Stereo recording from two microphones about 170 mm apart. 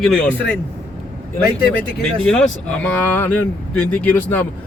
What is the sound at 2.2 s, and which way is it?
Speech, 5° left (ahead or behind).